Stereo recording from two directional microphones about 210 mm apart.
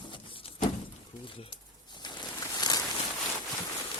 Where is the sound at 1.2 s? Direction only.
25° left (ahead or behind).